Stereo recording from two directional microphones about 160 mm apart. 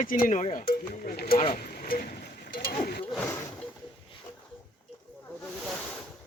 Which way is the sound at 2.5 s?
75° left (ahead or behind).